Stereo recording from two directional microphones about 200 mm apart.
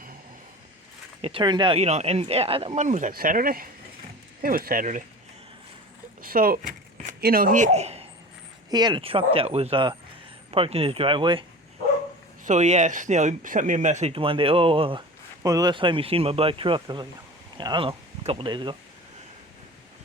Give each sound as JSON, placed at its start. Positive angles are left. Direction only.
{"t": 1.2, "sound": "speech", "side_deg": -25}
{"t": 6.2, "sound": "speech", "side_deg": -45}
{"t": 8.7, "sound": "speech", "side_deg": -20}
{"t": 12.5, "sound": "speech", "side_deg": -35}